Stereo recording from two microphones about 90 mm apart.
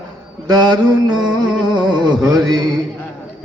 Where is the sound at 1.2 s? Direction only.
10° right (ahead or behind).